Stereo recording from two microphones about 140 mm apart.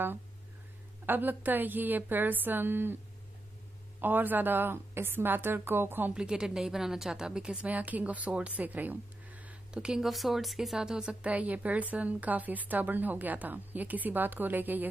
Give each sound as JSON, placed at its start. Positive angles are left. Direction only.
{"t": 1.0, "sound": "a woman's voice", "side_deg": -15}
{"t": 4.0, "sound": "a woman's voice", "side_deg": -15}